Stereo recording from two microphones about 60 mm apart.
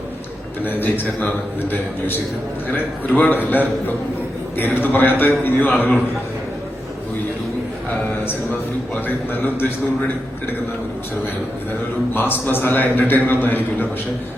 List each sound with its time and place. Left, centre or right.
0.6 s a man's voice: left
9.0 s a man's voice: left
12.1 s a man's voice: left